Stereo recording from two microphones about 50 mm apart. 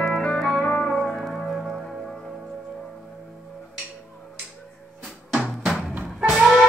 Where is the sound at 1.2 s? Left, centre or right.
Centre.